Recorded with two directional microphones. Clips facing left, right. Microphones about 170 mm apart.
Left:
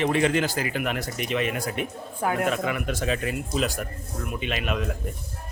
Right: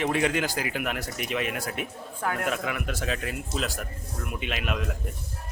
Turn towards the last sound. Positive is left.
turn(degrees=0)  # may be behind; listen again after turning